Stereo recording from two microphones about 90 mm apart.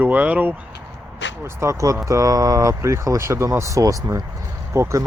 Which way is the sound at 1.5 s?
30° right (ahead or behind).